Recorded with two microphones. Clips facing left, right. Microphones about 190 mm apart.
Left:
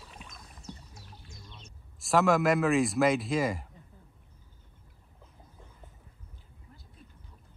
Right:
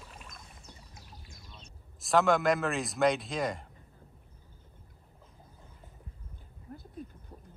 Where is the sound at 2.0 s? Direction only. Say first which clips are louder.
Left 1 dB; centre (ahead or behind).